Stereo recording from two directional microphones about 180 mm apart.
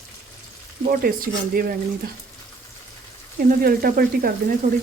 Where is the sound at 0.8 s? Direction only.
50° right (ahead or behind).